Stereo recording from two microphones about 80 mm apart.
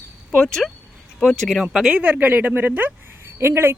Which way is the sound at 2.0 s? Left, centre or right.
Centre.